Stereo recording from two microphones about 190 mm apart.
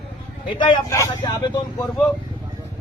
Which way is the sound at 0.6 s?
20° left (ahead or behind).